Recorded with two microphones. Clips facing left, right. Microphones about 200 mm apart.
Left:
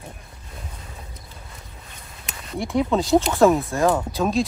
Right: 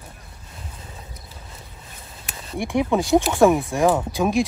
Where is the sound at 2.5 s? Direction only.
15° right (ahead or behind).